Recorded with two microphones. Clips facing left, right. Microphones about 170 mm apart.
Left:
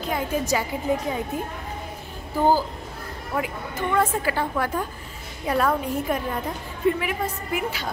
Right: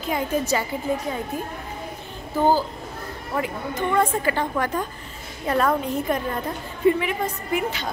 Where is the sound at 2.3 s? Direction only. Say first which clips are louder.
Right 1 dB; 10° left (ahead or behind).